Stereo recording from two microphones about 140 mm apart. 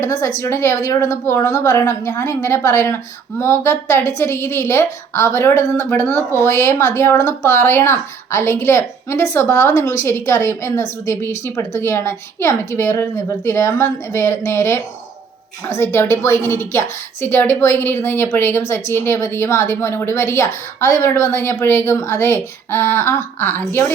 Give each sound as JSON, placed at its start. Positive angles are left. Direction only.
{"t": 0.0, "sound": "a woman's voice", "side_deg": 20}